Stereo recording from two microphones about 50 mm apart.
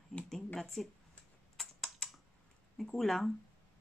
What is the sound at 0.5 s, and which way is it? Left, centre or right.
Speech, centre.